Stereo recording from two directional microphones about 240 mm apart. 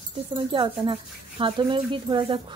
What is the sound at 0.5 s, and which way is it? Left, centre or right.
A woman's voice, right.